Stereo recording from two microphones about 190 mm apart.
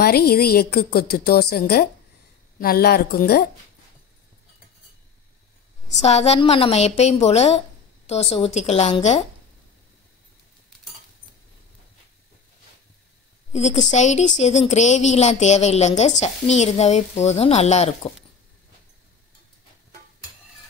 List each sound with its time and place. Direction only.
0.0 s a woman's voice: 55° left (ahead or behind)
5.9 s speech: 35° left (ahead or behind)
13.5 s speech: 35° left (ahead or behind)